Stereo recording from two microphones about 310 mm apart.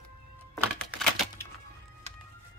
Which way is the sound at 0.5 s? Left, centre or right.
Centre.